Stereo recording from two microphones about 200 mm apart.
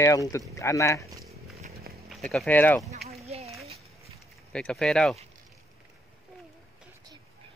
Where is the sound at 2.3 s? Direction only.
5° left (ahead or behind).